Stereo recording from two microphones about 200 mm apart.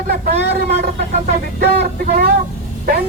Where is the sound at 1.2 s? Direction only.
50° right (ahead or behind).